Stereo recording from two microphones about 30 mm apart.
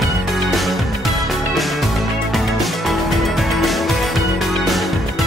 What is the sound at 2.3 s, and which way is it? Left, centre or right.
Music, centre.